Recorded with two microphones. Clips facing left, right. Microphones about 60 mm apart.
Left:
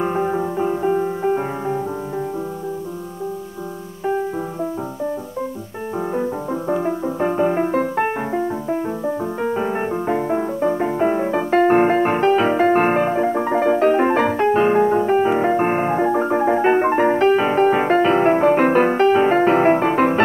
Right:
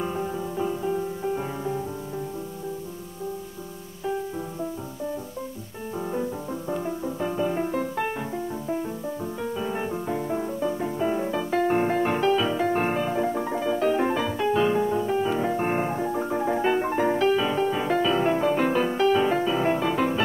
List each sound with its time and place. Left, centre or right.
0.0 s music: left
5.9 s music: left
13.1 s music: left